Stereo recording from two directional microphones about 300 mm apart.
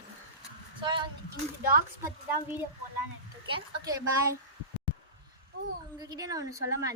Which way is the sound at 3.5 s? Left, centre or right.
Centre.